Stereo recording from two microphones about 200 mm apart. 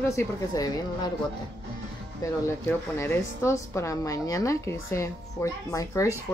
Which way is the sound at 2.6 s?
10° left (ahead or behind).